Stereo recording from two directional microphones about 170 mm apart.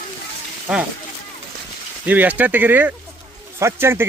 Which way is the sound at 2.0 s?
10° right (ahead or behind).